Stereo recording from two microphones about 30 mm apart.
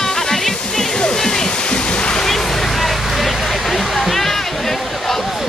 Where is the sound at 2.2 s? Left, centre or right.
Centre.